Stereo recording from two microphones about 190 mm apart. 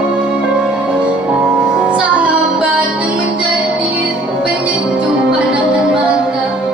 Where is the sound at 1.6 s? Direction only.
5° right (ahead or behind).